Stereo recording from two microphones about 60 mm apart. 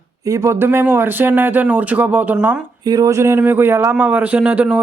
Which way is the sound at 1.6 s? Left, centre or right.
Right.